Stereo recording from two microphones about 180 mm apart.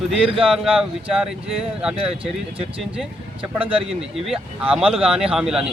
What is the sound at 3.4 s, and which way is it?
Speech, 30° right (ahead or behind).